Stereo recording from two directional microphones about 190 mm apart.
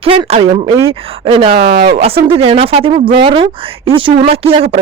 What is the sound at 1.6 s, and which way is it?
Speech, 60° right (ahead or behind).